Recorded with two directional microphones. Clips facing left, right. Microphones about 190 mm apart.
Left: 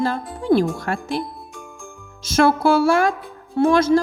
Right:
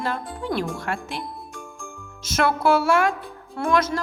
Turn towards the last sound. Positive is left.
turn(degrees=30)  # may be behind; listen again after turning